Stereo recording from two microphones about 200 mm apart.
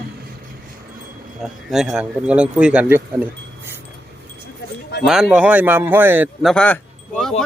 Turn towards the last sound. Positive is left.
turn(degrees=5)  # may be behind; listen again after turning